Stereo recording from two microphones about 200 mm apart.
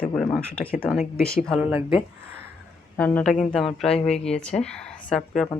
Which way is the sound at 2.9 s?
10° left (ahead or behind).